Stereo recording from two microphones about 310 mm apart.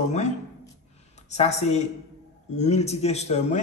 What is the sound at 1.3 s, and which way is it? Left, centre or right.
Speech, left.